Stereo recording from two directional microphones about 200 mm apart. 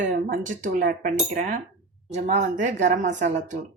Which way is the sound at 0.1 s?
40° right (ahead or behind).